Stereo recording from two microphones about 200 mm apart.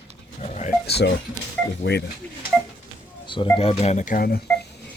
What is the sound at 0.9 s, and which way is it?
Speech, 55° left (ahead or behind).